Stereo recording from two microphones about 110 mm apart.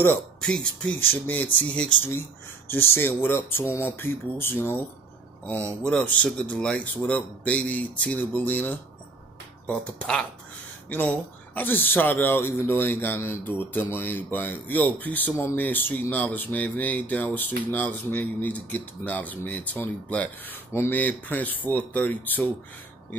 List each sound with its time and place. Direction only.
0.4 s speech: 10° left (ahead or behind)
2.7 s speech: 20° left (ahead or behind)